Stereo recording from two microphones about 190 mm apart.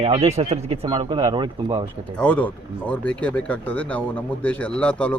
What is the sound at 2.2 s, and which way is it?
Speech, 5° left (ahead or behind).